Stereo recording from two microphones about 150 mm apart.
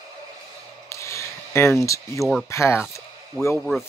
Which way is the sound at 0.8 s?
20° left (ahead or behind).